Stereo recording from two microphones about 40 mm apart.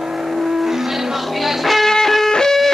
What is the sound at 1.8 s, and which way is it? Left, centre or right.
Music, centre.